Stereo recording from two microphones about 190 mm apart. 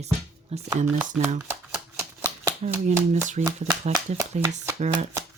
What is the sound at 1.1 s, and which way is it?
Speech, 5° right (ahead or behind).